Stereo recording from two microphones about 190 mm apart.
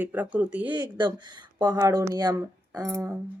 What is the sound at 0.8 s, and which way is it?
Speech, 25° right (ahead or behind).